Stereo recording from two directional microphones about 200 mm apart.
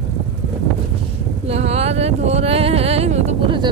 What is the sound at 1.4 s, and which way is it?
Speech, 30° right (ahead or behind).